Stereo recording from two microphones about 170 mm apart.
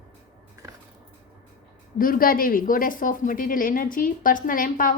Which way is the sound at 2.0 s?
55° left (ahead or behind).